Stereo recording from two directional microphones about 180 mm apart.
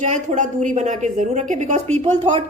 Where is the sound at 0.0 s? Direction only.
40° right (ahead or behind).